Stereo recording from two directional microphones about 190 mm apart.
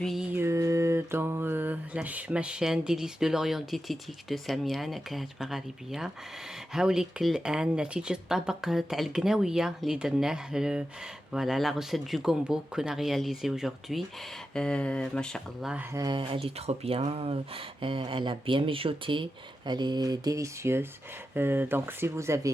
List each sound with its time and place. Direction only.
0.0 s mantra: centre (ahead or behind)
15.9 s speech: 20° right (ahead or behind)